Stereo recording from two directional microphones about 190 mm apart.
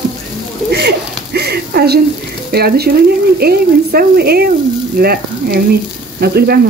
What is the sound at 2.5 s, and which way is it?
Speech, 55° right (ahead or behind).